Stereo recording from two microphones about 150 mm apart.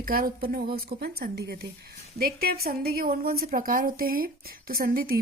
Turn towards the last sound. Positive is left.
turn(degrees=-80)